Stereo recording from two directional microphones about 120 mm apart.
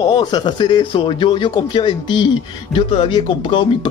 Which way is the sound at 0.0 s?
40° left (ahead or behind).